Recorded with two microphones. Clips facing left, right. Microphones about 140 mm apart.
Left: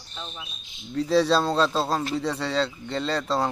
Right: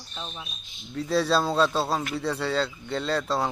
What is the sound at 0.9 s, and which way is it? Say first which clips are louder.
Speech: left 3 dB; centre (ahead or behind).